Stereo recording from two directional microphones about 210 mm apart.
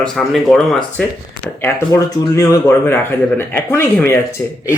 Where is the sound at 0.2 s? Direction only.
Centre (ahead or behind).